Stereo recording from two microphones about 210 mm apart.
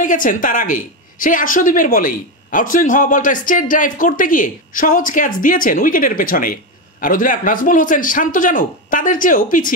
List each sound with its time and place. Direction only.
0.0 s a woman's voice: 40° left (ahead or behind)